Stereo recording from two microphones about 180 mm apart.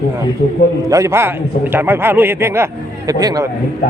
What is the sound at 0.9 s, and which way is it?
A man's voice, 15° right (ahead or behind).